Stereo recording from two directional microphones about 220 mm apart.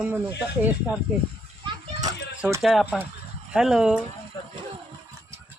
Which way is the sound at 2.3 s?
5° right (ahead or behind).